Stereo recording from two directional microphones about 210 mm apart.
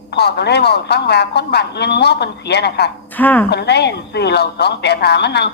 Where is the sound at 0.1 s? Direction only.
50° left (ahead or behind).